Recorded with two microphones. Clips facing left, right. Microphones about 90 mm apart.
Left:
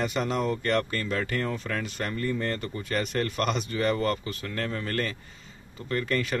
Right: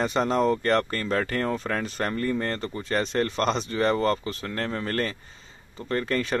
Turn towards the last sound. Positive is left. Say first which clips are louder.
# right 2 dB
turn(degrees=-30)  # may be behind; listen again after turning